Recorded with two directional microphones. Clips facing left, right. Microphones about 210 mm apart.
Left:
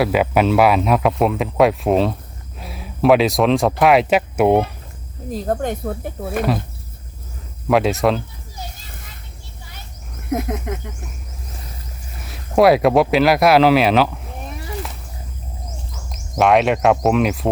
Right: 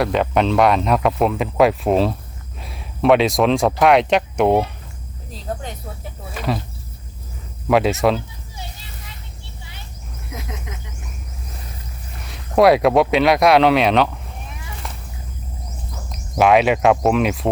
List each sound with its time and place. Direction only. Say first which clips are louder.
0.0 s speech: left 2 dB; 5° left (ahead or behind)
5.3 s speech: left 8 dB; 50° left (ahead or behind)
7.7 s speech: even; centre (ahead or behind)
8.5 s music: left 2 dB; 45° left (ahead or behind)
10.2 s speech: left 12 dB; 55° left (ahead or behind)
12.2 s speech: even; centre (ahead or behind)
16.4 s speech: even; centre (ahead or behind)